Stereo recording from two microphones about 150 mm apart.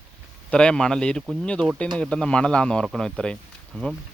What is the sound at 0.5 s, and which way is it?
Speech, 5° left (ahead or behind).